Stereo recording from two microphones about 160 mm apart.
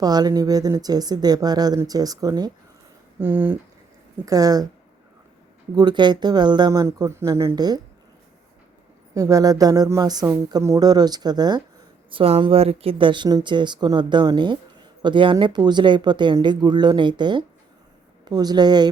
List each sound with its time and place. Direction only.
0.0 s speech: 25° right (ahead or behind)
3.2 s speech: 10° right (ahead or behind)
4.3 s speech: 25° right (ahead or behind)
5.7 s speech: 25° right (ahead or behind)
9.1 s speech: 20° right (ahead or behind)